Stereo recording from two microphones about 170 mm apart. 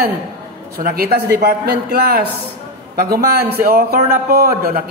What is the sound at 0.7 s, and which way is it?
A man's voice, 65° right (ahead or behind).